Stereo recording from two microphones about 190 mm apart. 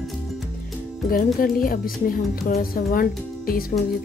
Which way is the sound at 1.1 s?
50° left (ahead or behind).